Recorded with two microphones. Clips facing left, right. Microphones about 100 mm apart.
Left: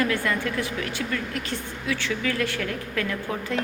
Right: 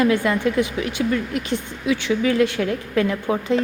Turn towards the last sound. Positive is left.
turn(degrees=-20)  # may be behind; listen again after turning